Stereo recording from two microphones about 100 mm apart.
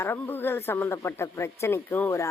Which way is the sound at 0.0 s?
20° left (ahead or behind).